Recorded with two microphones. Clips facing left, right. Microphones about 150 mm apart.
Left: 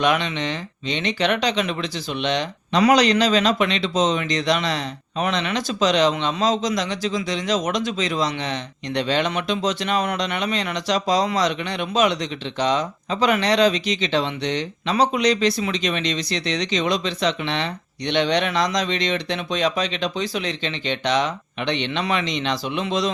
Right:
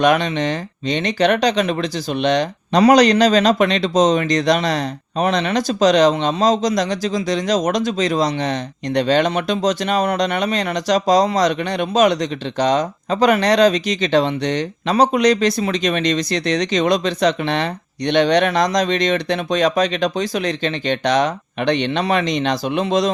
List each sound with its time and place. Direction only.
0.0 s speech: 45° right (ahead or behind)